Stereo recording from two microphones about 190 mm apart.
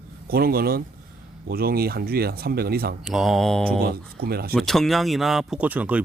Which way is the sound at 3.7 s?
55° right (ahead or behind).